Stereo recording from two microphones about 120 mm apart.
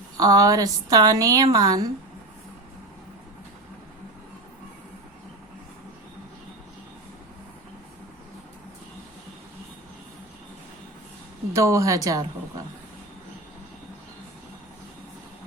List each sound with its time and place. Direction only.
0.2 s a woman's voice: 30° right (ahead or behind)
11.5 s a woman's voice: 25° right (ahead or behind)